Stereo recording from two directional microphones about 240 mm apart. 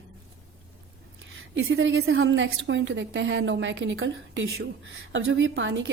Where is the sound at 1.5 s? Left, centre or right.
Right.